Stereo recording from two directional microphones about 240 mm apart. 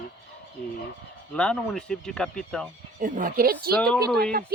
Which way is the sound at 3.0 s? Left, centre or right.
Right.